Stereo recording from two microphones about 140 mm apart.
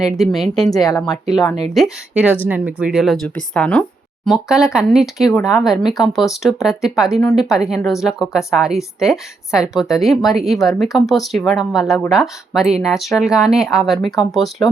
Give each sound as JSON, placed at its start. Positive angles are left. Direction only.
{"t": 0.0, "sound": "a woman's voice", "side_deg": 0}
{"t": 0.7, "sound": "speech", "side_deg": 25}
{"t": 1.7, "sound": "a woman's voice", "side_deg": -5}
{"t": 4.3, "sound": "a woman's voice", "side_deg": -5}